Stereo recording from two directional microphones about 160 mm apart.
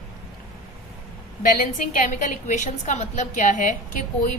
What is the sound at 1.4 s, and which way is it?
A woman's voice, 60° left (ahead or behind).